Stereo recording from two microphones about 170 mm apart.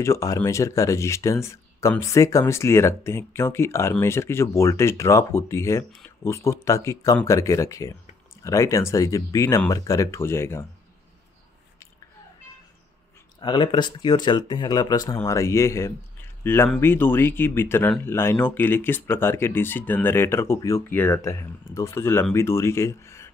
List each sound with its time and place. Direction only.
0.0 s speech: 20° left (ahead or behind)
13.4 s speech: 30° left (ahead or behind)